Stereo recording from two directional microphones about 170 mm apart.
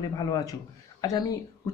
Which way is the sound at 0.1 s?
20° left (ahead or behind).